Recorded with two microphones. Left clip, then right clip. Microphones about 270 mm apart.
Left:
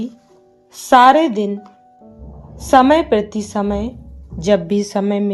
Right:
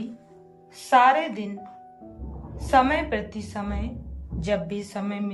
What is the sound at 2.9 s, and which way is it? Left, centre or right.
A woman's voice, centre.